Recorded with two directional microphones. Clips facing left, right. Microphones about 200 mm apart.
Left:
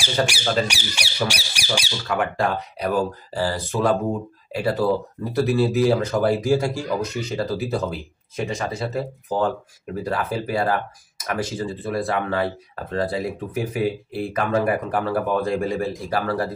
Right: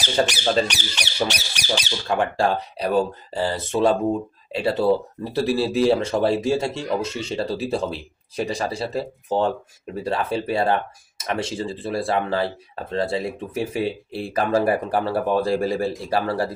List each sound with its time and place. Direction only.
0.7 s speech: 10° left (ahead or behind)
2.0 s speech: 30° right (ahead or behind)